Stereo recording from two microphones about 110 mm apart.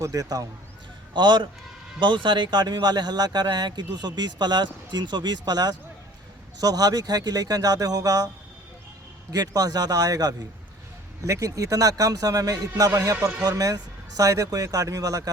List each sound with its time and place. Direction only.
0.0 s speech: 30° right (ahead or behind)
1.1 s a man's voice: 45° right (ahead or behind)
9.3 s speech: 35° right (ahead or behind)